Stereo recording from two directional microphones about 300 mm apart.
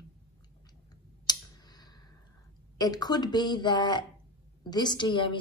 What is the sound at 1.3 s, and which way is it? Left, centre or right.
Tick-tock, centre.